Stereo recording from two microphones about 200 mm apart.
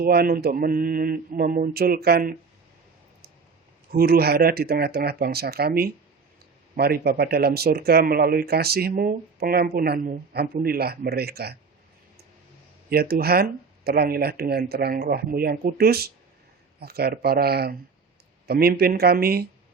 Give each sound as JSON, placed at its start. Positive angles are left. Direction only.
{"t": 0.0, "sound": "speech", "side_deg": -50}
{"t": 3.9, "sound": "speech", "side_deg": -50}
{"t": 12.9, "sound": "speech", "side_deg": -50}